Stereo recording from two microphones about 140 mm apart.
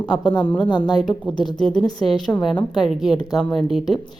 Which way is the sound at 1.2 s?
5° left (ahead or behind).